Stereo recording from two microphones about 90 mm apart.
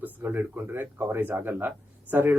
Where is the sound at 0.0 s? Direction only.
20° right (ahead or behind).